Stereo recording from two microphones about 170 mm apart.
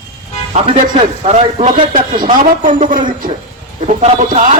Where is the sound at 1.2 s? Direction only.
40° right (ahead or behind).